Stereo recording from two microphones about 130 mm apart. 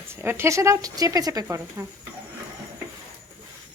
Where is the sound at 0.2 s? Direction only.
20° right (ahead or behind).